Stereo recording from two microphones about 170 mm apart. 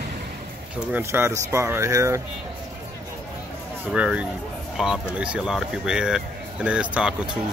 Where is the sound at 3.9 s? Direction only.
5° right (ahead or behind).